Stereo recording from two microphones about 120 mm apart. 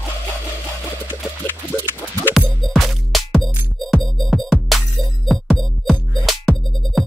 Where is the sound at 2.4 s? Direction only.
Centre (ahead or behind).